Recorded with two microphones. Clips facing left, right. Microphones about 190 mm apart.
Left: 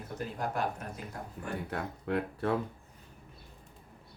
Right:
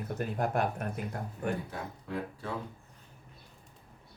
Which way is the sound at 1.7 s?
65° left (ahead or behind).